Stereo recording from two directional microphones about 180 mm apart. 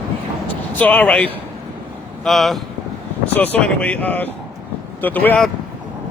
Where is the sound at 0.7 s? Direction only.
10° left (ahead or behind).